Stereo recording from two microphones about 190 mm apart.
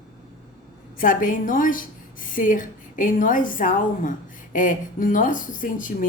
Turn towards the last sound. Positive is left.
turn(degrees=45)  # may be behind; listen again after turning